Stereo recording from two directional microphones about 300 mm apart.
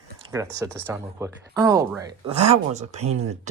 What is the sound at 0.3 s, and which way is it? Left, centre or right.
Speech, centre.